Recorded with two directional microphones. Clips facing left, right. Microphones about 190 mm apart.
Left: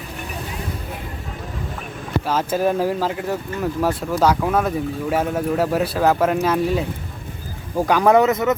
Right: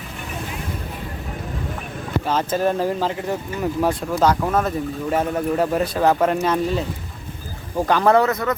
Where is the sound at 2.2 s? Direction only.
5° left (ahead or behind).